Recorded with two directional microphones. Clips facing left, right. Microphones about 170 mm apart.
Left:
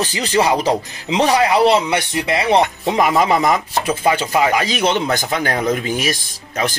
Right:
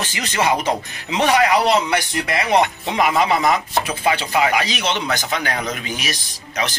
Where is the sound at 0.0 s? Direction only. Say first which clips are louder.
Left 4 dB; 35° left (ahead or behind).